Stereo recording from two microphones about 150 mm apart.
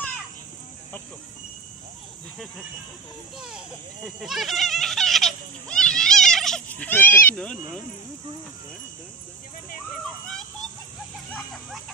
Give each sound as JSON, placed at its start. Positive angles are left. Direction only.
{"t": 3.3, "sound": "speech", "side_deg": -5}